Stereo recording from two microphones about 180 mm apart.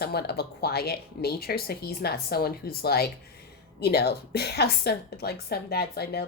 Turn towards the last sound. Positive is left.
turn(degrees=60)  # may be behind; listen again after turning